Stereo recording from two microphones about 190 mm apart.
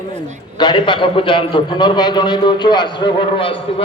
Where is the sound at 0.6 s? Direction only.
25° left (ahead or behind).